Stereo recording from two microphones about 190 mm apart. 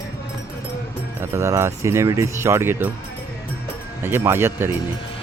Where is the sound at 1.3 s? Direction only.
15° right (ahead or behind).